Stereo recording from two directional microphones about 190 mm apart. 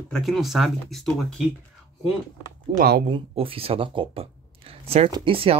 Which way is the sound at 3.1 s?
30° right (ahead or behind).